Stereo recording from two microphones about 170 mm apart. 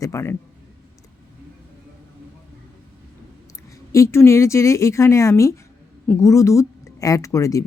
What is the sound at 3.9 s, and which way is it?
A woman's voice, 15° left (ahead or behind).